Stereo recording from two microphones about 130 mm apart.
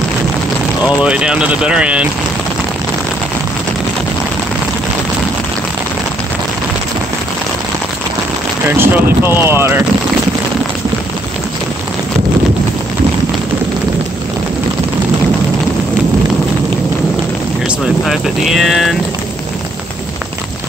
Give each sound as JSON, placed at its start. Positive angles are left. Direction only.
{"t": 0.8, "sound": "speech", "side_deg": -10}
{"t": 8.6, "sound": "speech", "side_deg": -15}
{"t": 17.6, "sound": "speech", "side_deg": 0}